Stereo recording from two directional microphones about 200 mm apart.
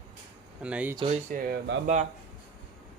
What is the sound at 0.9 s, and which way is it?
Speech, 30° right (ahead or behind).